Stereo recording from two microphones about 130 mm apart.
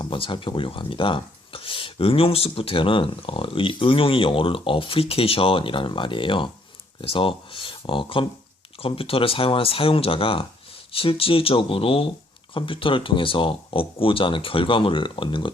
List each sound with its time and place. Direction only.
0.0 s speech: 40° left (ahead or behind)